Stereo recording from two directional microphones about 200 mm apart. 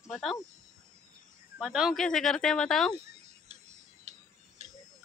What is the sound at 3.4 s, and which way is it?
Tick-tock, 35° right (ahead or behind).